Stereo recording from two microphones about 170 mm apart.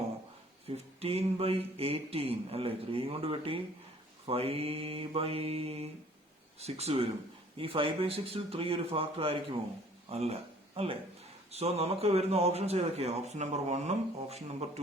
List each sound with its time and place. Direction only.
1.0 s speech: 35° right (ahead or behind)